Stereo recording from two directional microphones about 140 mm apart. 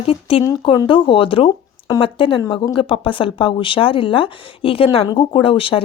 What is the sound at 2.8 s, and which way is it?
Speech, 40° left (ahead or behind).